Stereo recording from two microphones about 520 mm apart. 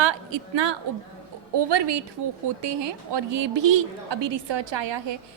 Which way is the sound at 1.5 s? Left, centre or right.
Right.